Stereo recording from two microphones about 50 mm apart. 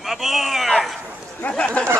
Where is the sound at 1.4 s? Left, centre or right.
Left.